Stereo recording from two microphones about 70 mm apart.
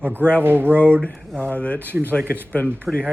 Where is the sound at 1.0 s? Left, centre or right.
Centre.